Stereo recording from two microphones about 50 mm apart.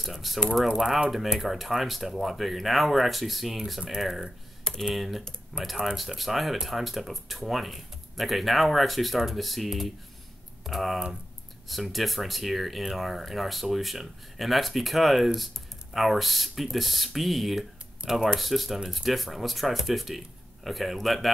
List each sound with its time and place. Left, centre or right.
0.0 s speech: centre
0.7 s speech: centre
1.5 s speech: centre